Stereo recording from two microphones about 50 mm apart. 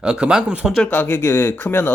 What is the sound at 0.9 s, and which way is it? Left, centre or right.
Speech, left.